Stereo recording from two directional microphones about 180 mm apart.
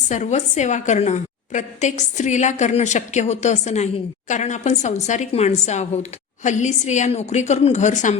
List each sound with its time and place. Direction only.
0.1 s a woman's voice: 40° left (ahead or behind)